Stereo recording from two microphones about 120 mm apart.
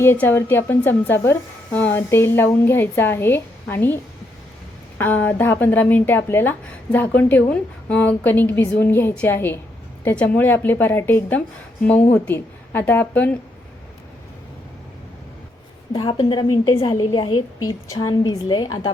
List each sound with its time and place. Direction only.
0.0 s speech: 20° left (ahead or behind)
15.9 s a woman's voice: 35° left (ahead or behind)
17.8 s a woman's voice: 30° left (ahead or behind)